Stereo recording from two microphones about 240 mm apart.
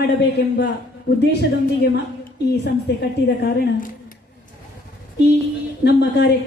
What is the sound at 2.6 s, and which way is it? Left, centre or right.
A woman's voice, left.